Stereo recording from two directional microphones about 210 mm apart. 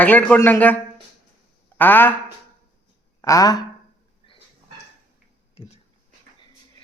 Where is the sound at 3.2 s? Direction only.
15° left (ahead or behind).